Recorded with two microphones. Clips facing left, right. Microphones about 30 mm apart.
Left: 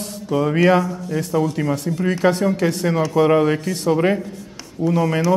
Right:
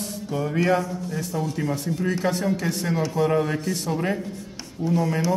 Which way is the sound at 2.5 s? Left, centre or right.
Left.